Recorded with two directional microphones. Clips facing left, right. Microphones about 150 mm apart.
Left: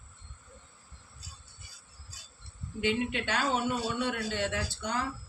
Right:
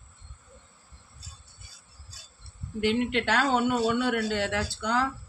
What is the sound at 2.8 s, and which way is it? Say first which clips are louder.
A man's voice: right 5 dB; 75° right (ahead or behind).